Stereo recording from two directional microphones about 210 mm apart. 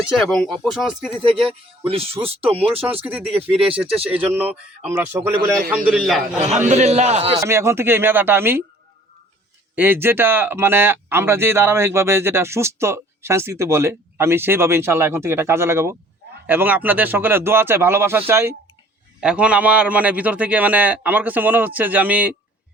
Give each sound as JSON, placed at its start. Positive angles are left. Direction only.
{"t": 0.3, "sound": "speech", "side_deg": 0}
{"t": 1.5, "sound": "speech", "side_deg": -25}
{"t": 3.0, "sound": "speech", "side_deg": -5}
{"t": 5.9, "sound": "speech", "side_deg": 0}
{"t": 6.7, "sound": "a man's voice", "side_deg": -30}
{"t": 7.4, "sound": "speech", "side_deg": -15}
{"t": 9.7, "sound": "speech", "side_deg": -10}